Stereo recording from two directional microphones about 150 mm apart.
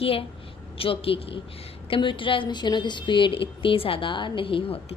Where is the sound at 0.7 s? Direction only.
40° left (ahead or behind).